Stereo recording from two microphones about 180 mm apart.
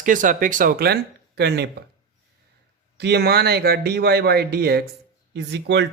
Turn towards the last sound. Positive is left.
turn(degrees=-70)  # may be behind; listen again after turning